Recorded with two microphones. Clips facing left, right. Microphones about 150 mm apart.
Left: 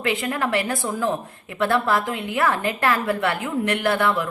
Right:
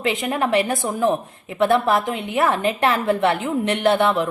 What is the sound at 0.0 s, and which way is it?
A woman's voice, 20° right (ahead or behind).